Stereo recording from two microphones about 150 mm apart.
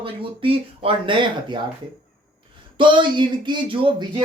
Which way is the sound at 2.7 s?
35° right (ahead or behind).